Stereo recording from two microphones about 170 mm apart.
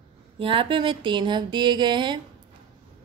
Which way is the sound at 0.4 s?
30° right (ahead or behind).